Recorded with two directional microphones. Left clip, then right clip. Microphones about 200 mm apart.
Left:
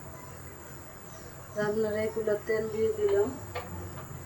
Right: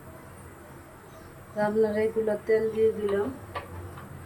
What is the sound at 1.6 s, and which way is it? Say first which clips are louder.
Speech: right 4 dB; 25° right (ahead or behind).